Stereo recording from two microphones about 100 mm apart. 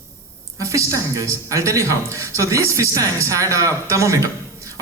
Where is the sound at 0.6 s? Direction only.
30° right (ahead or behind).